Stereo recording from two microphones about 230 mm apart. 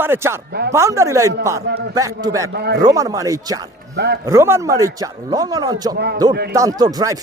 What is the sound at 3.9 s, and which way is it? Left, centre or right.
Speech, right.